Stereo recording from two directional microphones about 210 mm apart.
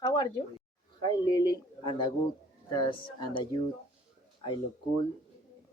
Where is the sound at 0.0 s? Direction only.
20° left (ahead or behind).